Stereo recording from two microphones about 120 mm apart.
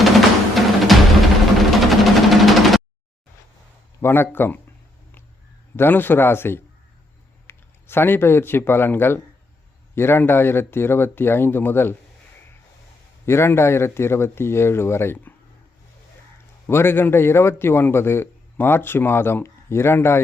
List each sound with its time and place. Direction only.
0.0 s music: centre (ahead or behind)
1.5 s a sound: centre (ahead or behind)
4.0 s speech: 20° left (ahead or behind)
5.7 s a man's voice: 15° left (ahead or behind)
13.2 s a man's voice: 20° left (ahead or behind)
16.6 s a man's voice: 20° left (ahead or behind)